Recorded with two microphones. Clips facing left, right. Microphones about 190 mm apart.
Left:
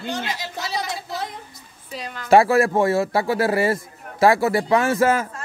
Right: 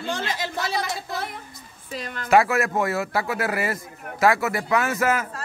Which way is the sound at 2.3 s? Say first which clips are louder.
Left 4 dB; 30° left (ahead or behind).